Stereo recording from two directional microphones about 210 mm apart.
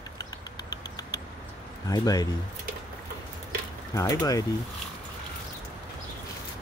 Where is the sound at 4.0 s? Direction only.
15° left (ahead or behind).